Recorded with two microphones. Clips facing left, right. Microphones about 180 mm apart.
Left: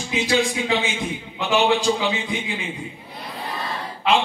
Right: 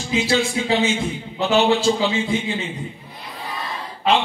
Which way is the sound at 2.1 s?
15° left (ahead or behind).